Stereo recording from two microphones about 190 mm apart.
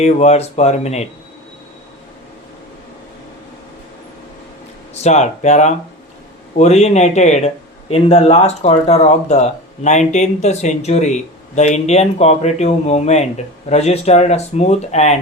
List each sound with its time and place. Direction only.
0.0 s speech: 35° left (ahead or behind)
5.0 s speech: 40° left (ahead or behind)